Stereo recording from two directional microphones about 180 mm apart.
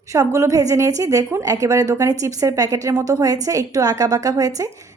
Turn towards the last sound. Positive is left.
turn(degrees=-20)  # may be behind; listen again after turning